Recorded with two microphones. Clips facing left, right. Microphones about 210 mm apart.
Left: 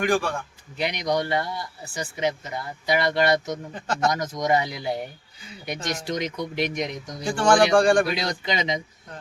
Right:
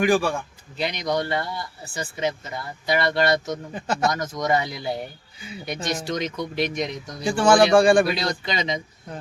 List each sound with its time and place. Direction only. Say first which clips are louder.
0.0 s speech: right 3 dB; 10° right (ahead or behind)
0.8 s speech: even; 15° left (ahead or behind)
3.5 s speech: right 2 dB; 10° right (ahead or behind)
4.1 s speech: even; 15° left (ahead or behind)
7.3 s speech: right 2 dB; 5° right (ahead or behind)
8.1 s speech: even; 15° left (ahead or behind)